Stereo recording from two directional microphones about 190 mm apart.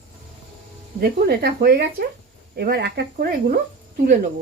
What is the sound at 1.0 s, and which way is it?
Speech, 55° right (ahead or behind).